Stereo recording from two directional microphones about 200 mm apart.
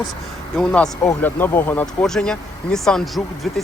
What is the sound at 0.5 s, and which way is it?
Speech, 5° left (ahead or behind).